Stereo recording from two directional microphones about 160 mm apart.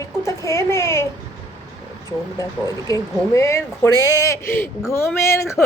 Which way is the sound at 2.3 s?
20° left (ahead or behind).